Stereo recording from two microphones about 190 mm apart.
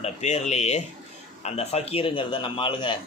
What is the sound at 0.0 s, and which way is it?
A man's voice, 35° left (ahead or behind).